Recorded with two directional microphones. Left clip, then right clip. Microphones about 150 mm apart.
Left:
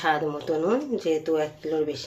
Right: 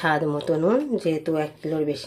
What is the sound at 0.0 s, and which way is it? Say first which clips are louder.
Speech: right 2 dB; 50° right (ahead or behind).